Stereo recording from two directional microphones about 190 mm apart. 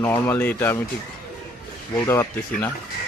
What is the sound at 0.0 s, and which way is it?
Speech, 10° left (ahead or behind).